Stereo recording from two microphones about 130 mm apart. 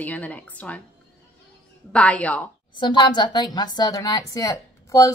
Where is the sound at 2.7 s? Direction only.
35° left (ahead or behind).